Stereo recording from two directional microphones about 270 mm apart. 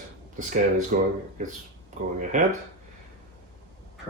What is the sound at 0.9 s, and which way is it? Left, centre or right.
Speech, right.